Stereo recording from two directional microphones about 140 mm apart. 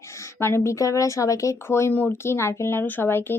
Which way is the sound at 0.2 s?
20° left (ahead or behind).